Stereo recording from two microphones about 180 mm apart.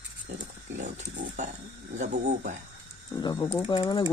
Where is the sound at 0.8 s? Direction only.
40° right (ahead or behind).